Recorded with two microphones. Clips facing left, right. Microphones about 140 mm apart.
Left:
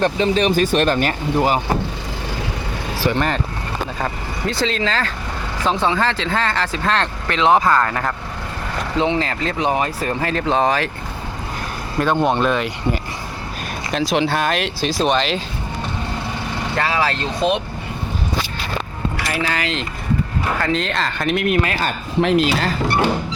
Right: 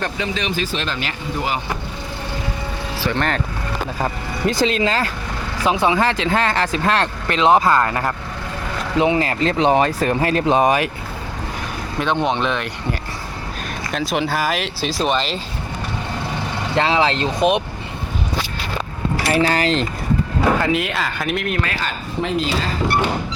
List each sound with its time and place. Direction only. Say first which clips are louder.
0.0 s speech: left 7 dB; 35° left (ahead or behind); by 1.5 s 50° left (ahead or behind)
3.1 s speech: left 1 dB; 5° left (ahead or behind)
4.0 s speech: right 5 dB; 15° right (ahead or behind)
9.0 s speech: right 3 dB; 10° right (ahead or behind)
11.9 s speech: left 3 dB; 5° left (ahead or behind)
16.7 s speech: right 3 dB; 20° right (ahead or behind)
19.2 s speech: right 6 dB; 30° right (ahead or behind)
20.6 s speech: right 1 dB; 15° right (ahead or behind)
22.2 s speech: left 5 dB; 70° left (ahead or behind)